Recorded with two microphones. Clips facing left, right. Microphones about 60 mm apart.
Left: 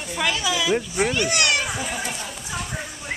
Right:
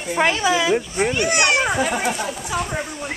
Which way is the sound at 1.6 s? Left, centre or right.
Right.